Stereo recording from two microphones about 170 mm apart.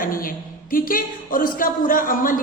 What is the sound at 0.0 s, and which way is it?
Speech, 55° left (ahead or behind).